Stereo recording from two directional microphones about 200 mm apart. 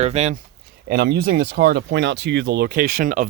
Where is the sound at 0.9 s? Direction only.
55° right (ahead or behind).